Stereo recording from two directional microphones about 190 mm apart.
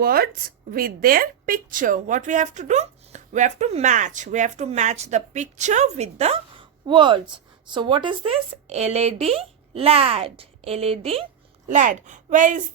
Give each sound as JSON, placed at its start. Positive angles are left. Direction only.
{"t": 0.0, "sound": "a woman's voice", "side_deg": -50}
{"t": 11.7, "sound": "a woman's voice", "side_deg": -40}